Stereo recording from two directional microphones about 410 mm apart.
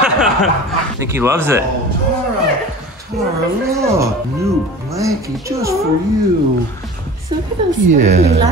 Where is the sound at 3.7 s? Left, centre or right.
Centre.